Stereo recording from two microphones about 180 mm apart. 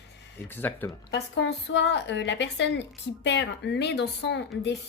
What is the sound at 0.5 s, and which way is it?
Speech, 10° left (ahead or behind).